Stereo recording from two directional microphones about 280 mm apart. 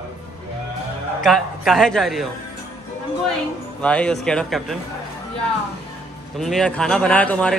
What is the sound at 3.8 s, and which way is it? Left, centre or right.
Speech, centre.